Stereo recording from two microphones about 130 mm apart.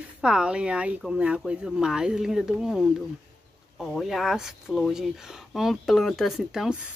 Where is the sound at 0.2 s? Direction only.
5° right (ahead or behind).